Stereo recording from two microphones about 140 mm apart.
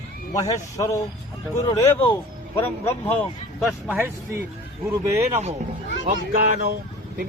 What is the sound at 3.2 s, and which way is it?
Speech, centre (ahead or behind).